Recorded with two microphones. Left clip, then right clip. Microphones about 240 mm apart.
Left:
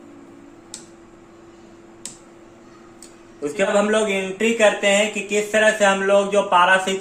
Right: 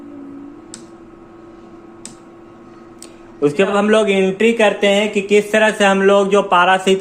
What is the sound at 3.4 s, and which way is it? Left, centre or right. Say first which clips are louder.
Speech: right 4 dB; right.